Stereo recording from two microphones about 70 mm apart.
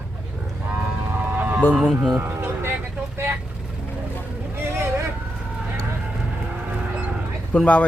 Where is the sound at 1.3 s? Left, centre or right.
Right.